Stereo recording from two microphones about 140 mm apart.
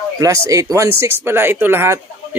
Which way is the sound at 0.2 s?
25° right (ahead or behind).